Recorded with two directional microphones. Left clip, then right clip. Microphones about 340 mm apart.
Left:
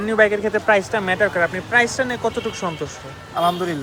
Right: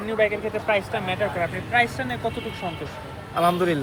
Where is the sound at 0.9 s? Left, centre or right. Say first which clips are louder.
Left 6 dB; left.